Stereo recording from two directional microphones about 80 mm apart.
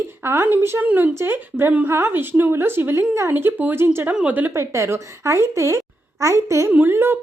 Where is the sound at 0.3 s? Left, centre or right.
Right.